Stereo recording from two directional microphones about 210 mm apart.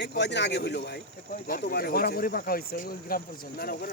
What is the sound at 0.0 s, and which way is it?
Speech, 55° left (ahead or behind).